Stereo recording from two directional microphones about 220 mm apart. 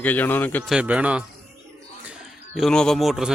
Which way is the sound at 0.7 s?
5° right (ahead or behind).